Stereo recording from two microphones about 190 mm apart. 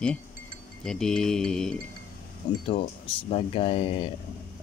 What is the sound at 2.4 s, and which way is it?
Speech, 25° left (ahead or behind).